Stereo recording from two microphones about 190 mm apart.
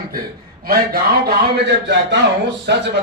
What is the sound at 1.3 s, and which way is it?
A man's voice, 60° right (ahead or behind).